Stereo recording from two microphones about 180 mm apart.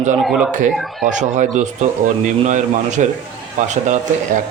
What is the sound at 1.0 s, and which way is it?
Speech, 45° right (ahead or behind).